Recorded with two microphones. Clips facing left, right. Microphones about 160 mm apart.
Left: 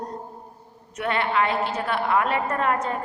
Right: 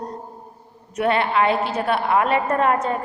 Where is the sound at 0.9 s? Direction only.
20° right (ahead or behind).